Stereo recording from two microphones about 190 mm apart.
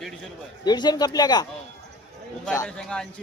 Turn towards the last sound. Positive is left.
turn(degrees=5)  # may be behind; listen again after turning